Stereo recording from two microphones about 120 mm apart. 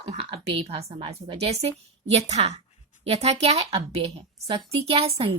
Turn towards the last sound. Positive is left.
turn(degrees=-55)  # may be behind; listen again after turning